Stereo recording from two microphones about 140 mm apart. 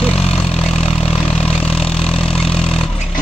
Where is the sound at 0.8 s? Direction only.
45° left (ahead or behind).